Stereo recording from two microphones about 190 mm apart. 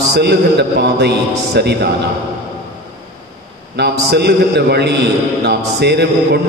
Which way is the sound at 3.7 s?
60° right (ahead or behind).